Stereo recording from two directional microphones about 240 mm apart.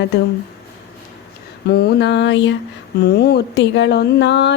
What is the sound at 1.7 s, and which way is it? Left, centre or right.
Speech, left.